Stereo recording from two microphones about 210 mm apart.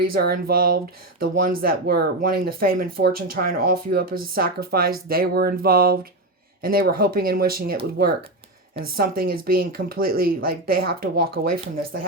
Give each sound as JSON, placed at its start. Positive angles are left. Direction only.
{"t": 0.0, "sound": "speech", "side_deg": -45}
{"t": 9.0, "sound": "speech", "side_deg": -45}